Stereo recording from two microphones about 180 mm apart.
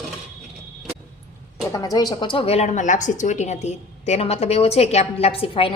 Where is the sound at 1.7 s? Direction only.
20° left (ahead or behind).